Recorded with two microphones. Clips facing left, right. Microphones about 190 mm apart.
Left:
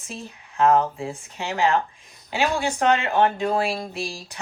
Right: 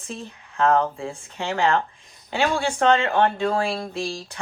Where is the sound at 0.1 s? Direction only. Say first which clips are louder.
Right 2 dB; 15° left (ahead or behind).